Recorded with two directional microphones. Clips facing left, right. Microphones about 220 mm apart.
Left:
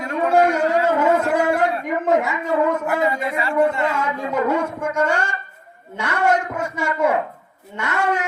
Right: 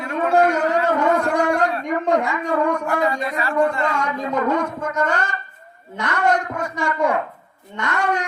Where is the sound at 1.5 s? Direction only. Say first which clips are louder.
Even; 5° left (ahead or behind).